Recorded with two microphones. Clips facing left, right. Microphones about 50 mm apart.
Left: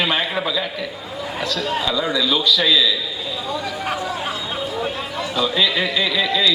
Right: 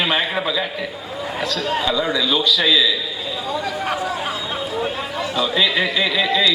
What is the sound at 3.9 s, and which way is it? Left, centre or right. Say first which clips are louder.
Chatter: right 1 dB; right.